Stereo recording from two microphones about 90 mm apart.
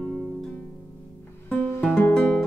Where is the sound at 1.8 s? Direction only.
15° left (ahead or behind).